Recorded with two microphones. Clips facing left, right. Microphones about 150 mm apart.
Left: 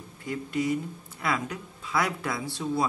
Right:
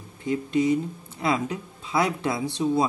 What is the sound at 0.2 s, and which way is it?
Speech, 25° right (ahead or behind).